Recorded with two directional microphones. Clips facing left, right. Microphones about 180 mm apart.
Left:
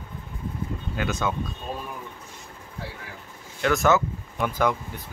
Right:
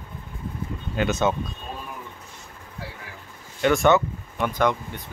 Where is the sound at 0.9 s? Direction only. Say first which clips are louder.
Right 5 dB; 25° right (ahead or behind).